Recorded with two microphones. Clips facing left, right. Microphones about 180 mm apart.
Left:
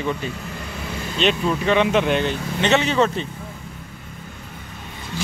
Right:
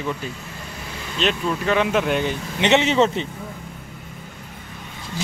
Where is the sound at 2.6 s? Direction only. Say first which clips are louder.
Right 1 dB; 20° right (ahead or behind).